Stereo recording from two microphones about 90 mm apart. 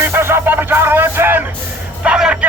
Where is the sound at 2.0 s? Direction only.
10° right (ahead or behind).